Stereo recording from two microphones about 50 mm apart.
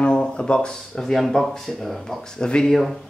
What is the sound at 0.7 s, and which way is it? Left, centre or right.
Speech, centre.